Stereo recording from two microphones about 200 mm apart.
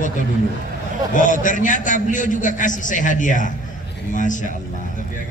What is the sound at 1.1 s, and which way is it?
A man's voice, 40° left (ahead or behind).